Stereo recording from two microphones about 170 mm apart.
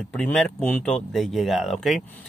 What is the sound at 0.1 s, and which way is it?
Speech, 5° left (ahead or behind).